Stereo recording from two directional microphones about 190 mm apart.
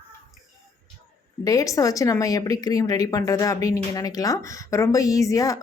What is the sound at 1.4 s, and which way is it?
Speech, 20° left (ahead or behind).